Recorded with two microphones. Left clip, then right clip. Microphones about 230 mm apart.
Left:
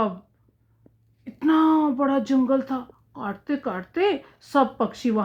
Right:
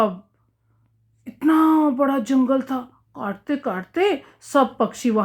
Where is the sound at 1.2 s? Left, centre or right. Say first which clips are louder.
Right 2 dB; right.